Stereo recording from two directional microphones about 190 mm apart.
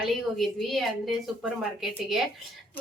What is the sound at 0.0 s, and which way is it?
Speech, centre (ahead or behind).